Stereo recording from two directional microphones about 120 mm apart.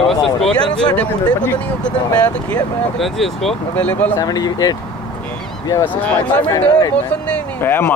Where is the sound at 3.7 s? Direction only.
15° left (ahead or behind).